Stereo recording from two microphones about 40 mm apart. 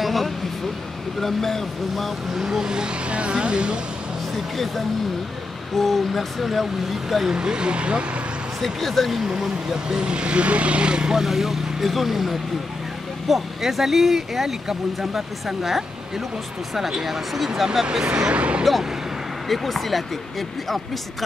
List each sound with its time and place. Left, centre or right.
0.0 s a sound: centre
1.2 s speech: centre
2.4 s speech: centre
5.8 s speech: centre
7.3 s speech: right
8.5 s speech: centre
9.2 s speech: centre
9.8 s speech: right
11.1 s speech: centre
18.0 s speech: right
18.6 s speech: centre